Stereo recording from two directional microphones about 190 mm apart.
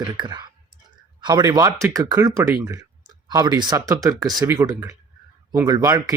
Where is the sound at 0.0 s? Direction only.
20° right (ahead or behind).